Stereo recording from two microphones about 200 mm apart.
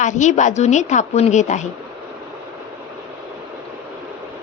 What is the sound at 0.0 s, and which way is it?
A woman's voice, 35° left (ahead or behind).